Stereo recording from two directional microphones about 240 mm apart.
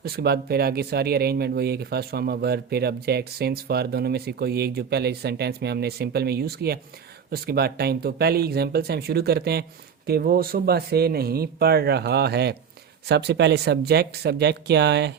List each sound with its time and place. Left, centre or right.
0.0 s speech: right